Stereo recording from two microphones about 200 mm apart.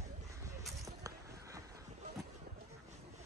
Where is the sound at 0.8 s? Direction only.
15° right (ahead or behind).